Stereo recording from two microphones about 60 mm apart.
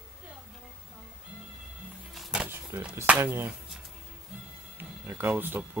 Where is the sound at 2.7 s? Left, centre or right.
Right.